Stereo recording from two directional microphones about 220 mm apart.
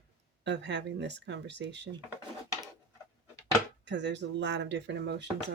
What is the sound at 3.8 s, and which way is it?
Speech, 50° right (ahead or behind).